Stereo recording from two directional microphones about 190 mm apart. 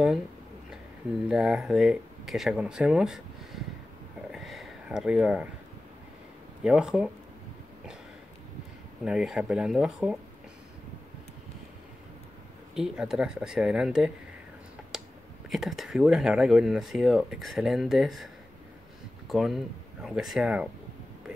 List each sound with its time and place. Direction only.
1.3 s speech: centre (ahead or behind)
4.3 s a sound: centre (ahead or behind)
6.6 s speech: 5° right (ahead or behind)
9.0 s speech: 5° right (ahead or behind)
12.7 s speech: 5° right (ahead or behind)
14.9 s a sound: centre (ahead or behind)
15.5 s speech: centre (ahead or behind)